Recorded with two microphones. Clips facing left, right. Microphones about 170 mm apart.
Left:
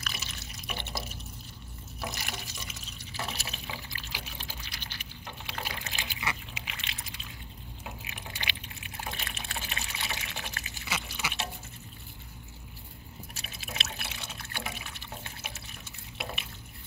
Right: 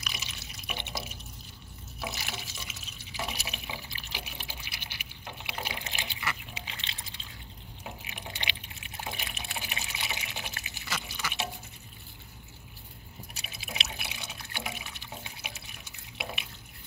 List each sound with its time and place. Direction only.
0.0 s drip: 15° right (ahead or behind)
2.0 s water: centre (ahead or behind)
3.2 s liquid: 15° right (ahead or behind)
5.5 s water: 15° right (ahead or behind)
9.1 s water: 10° right (ahead or behind)
10.9 s drip: 5° left (ahead or behind)
13.3 s water: 15° right (ahead or behind)